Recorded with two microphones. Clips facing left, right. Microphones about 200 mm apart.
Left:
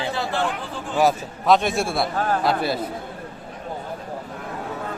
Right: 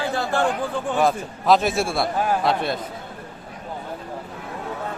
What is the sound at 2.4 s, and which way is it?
Speech, centre (ahead or behind).